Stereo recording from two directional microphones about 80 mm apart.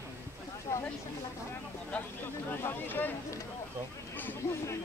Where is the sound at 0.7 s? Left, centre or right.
Left.